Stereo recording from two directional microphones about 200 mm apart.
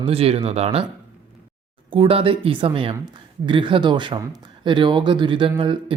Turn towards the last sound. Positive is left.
turn(degrees=-25)  # may be behind; listen again after turning